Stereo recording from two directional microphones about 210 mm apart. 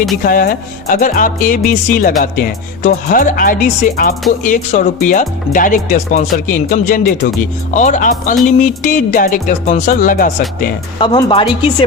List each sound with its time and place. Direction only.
0.2 s speech: 45° left (ahead or behind)
10.9 s speech: 25° left (ahead or behind)